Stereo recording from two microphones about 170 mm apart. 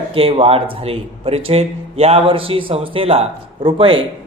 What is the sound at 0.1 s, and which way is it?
A man's voice, 35° right (ahead or behind).